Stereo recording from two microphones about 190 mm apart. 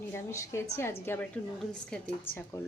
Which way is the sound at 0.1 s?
15° left (ahead or behind).